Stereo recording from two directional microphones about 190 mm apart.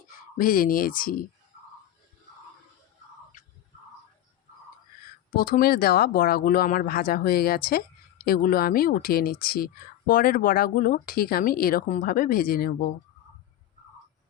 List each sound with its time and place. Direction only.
0.3 s speech: 50° left (ahead or behind)
5.3 s speech: 50° left (ahead or behind)